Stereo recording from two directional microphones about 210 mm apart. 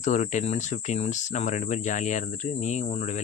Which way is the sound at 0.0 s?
35° left (ahead or behind).